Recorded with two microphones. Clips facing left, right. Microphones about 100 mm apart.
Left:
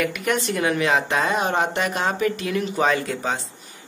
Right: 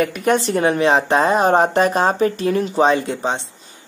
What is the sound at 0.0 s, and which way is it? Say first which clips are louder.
Speech: right 6 dB; 35° right (ahead or behind).